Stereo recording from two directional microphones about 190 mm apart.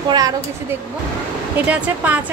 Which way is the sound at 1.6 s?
10° right (ahead or behind).